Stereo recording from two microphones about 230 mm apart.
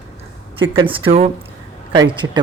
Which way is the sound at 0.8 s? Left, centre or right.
Right.